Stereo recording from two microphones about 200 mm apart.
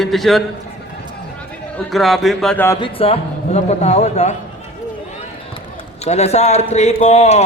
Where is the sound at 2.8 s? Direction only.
25° left (ahead or behind).